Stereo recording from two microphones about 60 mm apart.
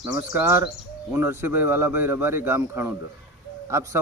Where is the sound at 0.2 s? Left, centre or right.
Right.